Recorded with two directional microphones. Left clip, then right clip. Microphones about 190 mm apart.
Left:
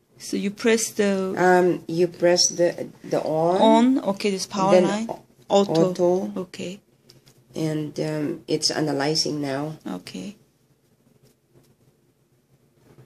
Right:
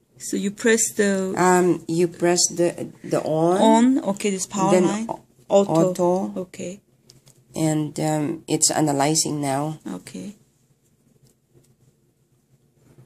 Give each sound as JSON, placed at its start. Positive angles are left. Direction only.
{"t": 0.2, "sound": "speech", "side_deg": -5}
{"t": 1.3, "sound": "speech", "side_deg": -50}
{"t": 3.6, "sound": "speech", "side_deg": -15}
{"t": 5.9, "sound": "speech", "side_deg": -45}
{"t": 6.3, "sound": "speech", "side_deg": 0}
{"t": 7.1, "sound": "speech", "side_deg": -50}
{"t": 9.8, "sound": "speech", "side_deg": 0}